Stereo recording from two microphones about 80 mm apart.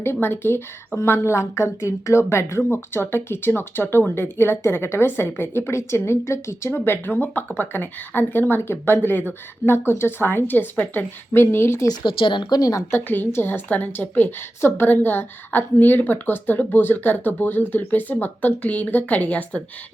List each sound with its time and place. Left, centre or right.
0.0 s speech: left
12.0 s speech: left
12.9 s speech: left